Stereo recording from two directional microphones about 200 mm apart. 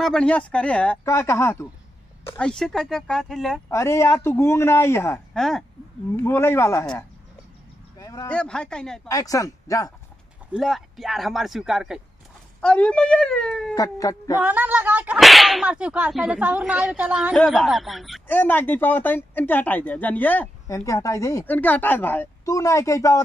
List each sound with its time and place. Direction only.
0.0 s speech: 5° left (ahead or behind)
3.7 s whip: 15° left (ahead or behind)
5.4 s speech: centre (ahead or behind)
6.2 s whip: 10° left (ahead or behind)
8.0 s a sound: 20° left (ahead or behind)
8.3 s speech: 5° left (ahead or behind)
9.0 s whip: 15° left (ahead or behind)
10.5 s speech: centre (ahead or behind)
13.7 s whip: 15° left (ahead or behind)
14.4 s whip: 10° right (ahead or behind); by 23.2 s 15° left (ahead or behind)